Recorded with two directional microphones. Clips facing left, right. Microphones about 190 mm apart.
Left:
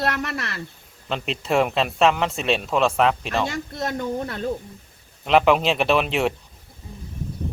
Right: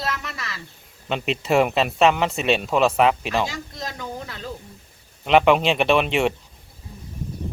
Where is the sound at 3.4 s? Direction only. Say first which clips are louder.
Left 5 dB; 55° left (ahead or behind).